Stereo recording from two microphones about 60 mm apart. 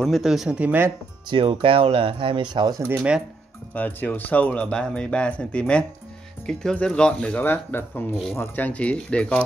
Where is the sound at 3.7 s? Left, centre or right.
Left.